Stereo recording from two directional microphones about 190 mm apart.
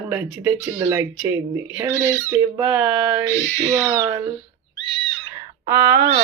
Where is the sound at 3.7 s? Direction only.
15° right (ahead or behind).